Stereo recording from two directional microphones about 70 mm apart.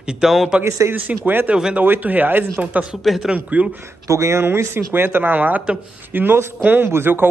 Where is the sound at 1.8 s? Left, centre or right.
Right.